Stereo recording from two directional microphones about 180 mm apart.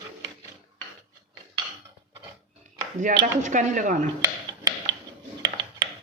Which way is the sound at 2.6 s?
45° right (ahead or behind).